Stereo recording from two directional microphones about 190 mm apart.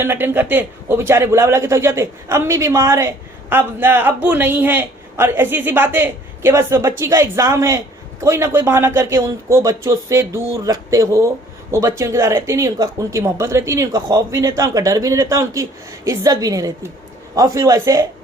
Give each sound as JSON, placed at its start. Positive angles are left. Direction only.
{"t": 0.0, "sound": "speech", "side_deg": -10}